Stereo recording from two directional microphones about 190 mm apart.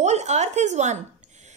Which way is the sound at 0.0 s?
35° right (ahead or behind).